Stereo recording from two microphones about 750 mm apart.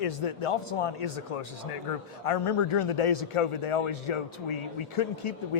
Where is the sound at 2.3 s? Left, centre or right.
Left.